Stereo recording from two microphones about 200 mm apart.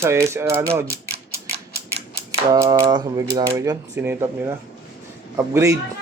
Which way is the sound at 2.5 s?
15° right (ahead or behind).